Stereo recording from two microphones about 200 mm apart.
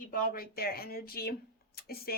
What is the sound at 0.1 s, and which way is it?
A woman's voice, 45° left (ahead or behind).